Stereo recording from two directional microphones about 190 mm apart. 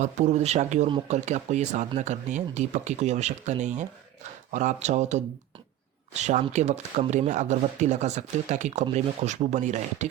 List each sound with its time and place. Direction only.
0.0 s speech: 40° right (ahead or behind)